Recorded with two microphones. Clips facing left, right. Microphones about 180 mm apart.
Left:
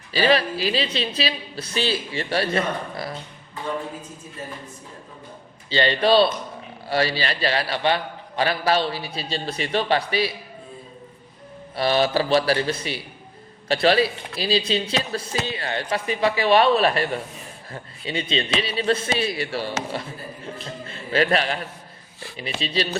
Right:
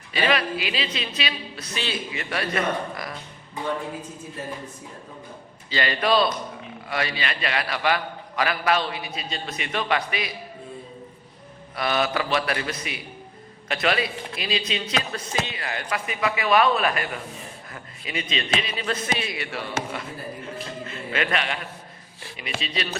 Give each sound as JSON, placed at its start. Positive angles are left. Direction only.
{"t": 0.1, "sound": "a man's voice", "side_deg": 35}
{"t": 5.6, "sound": "a man's voice", "side_deg": 30}
{"t": 11.8, "sound": "a man's voice", "side_deg": 30}
{"t": 20.8, "sound": "a sound", "side_deg": 30}
{"t": 22.4, "sound": "a man's voice", "side_deg": 35}